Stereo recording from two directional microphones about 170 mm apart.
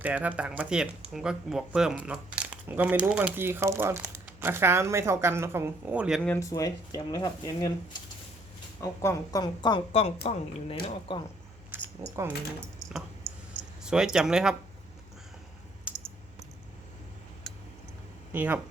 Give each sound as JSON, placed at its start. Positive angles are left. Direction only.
{"t": 0.0, "sound": "speech", "side_deg": -10}
{"t": 6.2, "sound": "speech", "side_deg": 15}
{"t": 8.8, "sound": "speech", "side_deg": 15}
{"t": 11.7, "sound": "keys jangling", "side_deg": -10}
{"t": 13.8, "sound": "speech", "side_deg": -5}
{"t": 15.9, "sound": "typing", "side_deg": -5}
{"t": 18.3, "sound": "speech", "side_deg": -10}